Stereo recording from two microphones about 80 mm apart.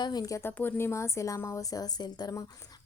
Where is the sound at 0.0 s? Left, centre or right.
Left.